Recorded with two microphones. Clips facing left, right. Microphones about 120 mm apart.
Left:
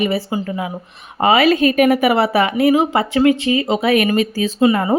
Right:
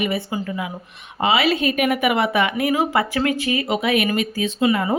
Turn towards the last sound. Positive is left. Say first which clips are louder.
# left 4 dB
turn(degrees=35)  # may be behind; listen again after turning